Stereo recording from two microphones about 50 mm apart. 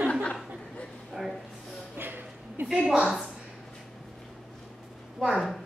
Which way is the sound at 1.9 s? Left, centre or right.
Right.